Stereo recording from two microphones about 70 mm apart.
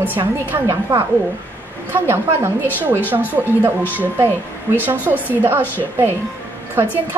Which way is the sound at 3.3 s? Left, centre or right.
Right.